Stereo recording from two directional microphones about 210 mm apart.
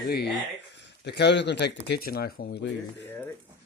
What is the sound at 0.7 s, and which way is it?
Speech, 55° left (ahead or behind).